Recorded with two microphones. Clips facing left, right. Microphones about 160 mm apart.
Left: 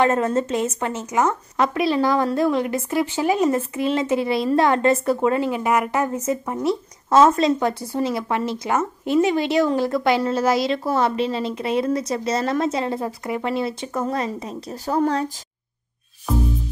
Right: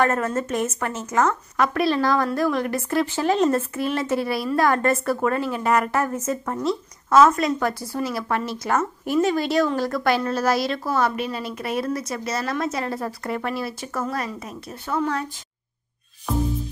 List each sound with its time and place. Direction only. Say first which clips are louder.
0.0 s a woman's voice: left 3 dB; 20° left (ahead or behind)
6.7 s a woman's voice: left 1 dB; 25° left (ahead or behind)
16.3 s music: left 1 dB; centre (ahead or behind)